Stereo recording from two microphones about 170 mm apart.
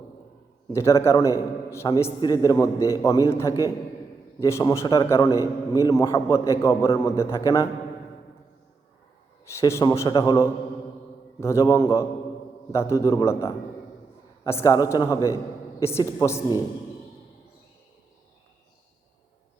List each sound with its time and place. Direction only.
0.7 s a man's voice: 15° left (ahead or behind)
4.4 s a man's voice: 15° left (ahead or behind)
9.6 s a man's voice: 15° left (ahead or behind)